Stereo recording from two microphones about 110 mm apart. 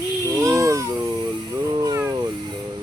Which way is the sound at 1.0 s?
40° right (ahead or behind).